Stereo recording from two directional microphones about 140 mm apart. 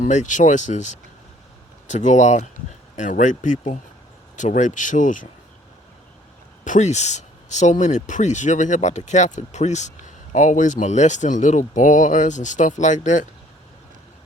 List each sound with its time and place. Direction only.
0.0 s speech: 60° left (ahead or behind)
6.7 s speech: 55° left (ahead or behind)